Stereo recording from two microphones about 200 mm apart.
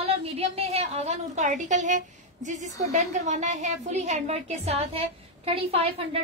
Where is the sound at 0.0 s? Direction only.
30° right (ahead or behind).